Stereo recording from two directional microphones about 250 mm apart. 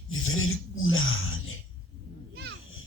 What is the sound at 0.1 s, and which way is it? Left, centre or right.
Speech, left.